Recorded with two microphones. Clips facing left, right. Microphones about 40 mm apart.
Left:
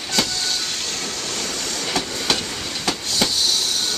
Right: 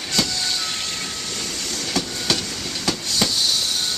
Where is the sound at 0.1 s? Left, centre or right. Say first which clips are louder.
Left 1 dB; centre.